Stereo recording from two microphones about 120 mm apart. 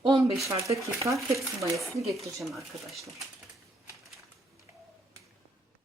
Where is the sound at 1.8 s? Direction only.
Centre (ahead or behind).